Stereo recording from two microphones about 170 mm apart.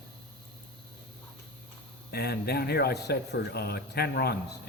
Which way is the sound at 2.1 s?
70° left (ahead or behind).